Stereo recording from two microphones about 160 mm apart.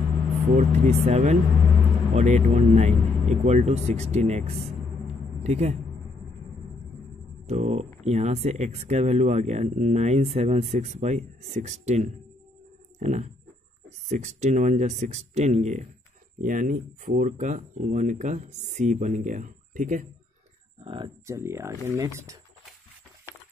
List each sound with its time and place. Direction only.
0.6 s speech: 45° right (ahead or behind)
7.4 s speech: 40° right (ahead or behind)
20.8 s speech: 35° right (ahead or behind)
21.3 s speech: 15° right (ahead or behind)